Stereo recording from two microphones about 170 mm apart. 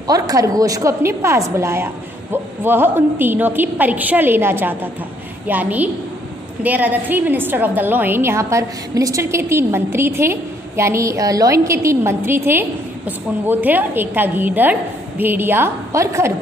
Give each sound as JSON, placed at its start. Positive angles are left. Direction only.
{"t": 0.0, "sound": "a woman's voice", "side_deg": -20}